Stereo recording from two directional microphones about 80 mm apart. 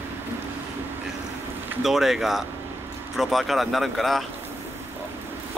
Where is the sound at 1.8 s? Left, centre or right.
Centre.